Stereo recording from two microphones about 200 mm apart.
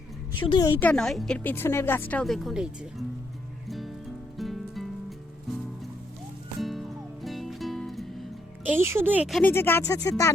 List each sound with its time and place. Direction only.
0.3 s speech: 25° left (ahead or behind)
0.7 s a woman's voice: 10° left (ahead or behind)
3.7 s music: centre (ahead or behind)
6.6 s music: centre (ahead or behind)
9.5 s a woman's voice: 10° left (ahead or behind)